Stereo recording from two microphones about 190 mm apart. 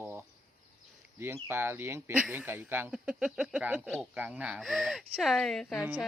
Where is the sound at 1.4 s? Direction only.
10° right (ahead or behind).